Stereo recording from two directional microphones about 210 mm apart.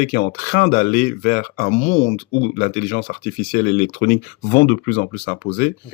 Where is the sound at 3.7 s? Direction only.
35° left (ahead or behind).